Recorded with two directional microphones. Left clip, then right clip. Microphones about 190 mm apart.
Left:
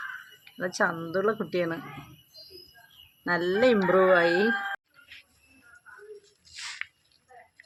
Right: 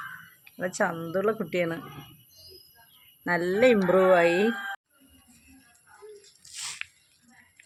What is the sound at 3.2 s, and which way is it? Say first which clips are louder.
Speech: right 1 dB; 15° right (ahead or behind).